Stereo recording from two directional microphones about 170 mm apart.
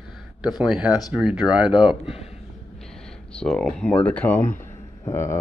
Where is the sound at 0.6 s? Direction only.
5° right (ahead or behind).